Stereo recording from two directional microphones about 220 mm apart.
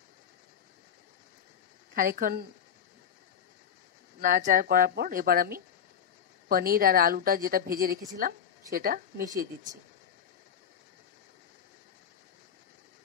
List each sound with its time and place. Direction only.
2.0 s speech: 40° right (ahead or behind)
4.2 s speech: 35° right (ahead or behind)